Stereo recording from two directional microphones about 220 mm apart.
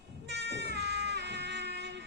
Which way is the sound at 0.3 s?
50° right (ahead or behind).